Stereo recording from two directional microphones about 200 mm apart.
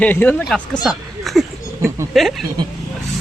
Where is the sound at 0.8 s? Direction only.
Centre (ahead or behind).